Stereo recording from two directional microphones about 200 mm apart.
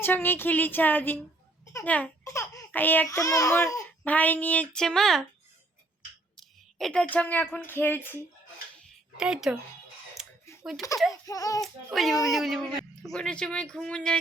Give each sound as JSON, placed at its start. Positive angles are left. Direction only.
{"t": 0.0, "sound": "a child's voice", "side_deg": 10}
{"t": 6.7, "sound": "a child's voice", "side_deg": 5}
{"t": 9.1, "sound": "speech", "side_deg": -5}
{"t": 10.2, "sound": "a sound", "side_deg": 0}
{"t": 10.6, "sound": "speech", "side_deg": 0}
{"t": 11.1, "sound": "a child's voice", "side_deg": 15}
{"t": 11.6, "sound": "speech", "side_deg": 0}